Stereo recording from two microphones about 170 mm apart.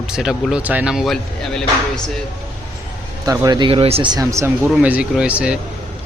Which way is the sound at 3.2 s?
20° right (ahead or behind).